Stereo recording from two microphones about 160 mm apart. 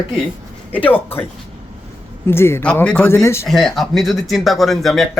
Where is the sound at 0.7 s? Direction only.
10° left (ahead or behind).